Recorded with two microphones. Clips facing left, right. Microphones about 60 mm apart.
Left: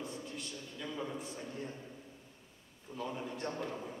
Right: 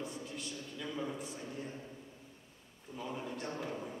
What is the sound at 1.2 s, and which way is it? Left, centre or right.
Speech, centre.